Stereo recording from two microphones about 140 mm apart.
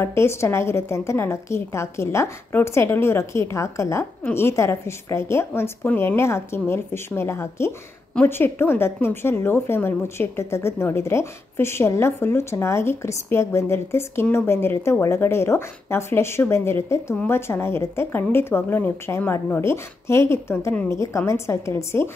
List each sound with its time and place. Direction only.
0.0 s a woman's voice: 20° left (ahead or behind)